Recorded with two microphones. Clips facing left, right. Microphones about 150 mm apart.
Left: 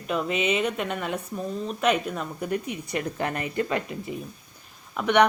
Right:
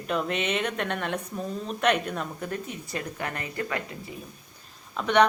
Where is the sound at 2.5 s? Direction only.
15° left (ahead or behind).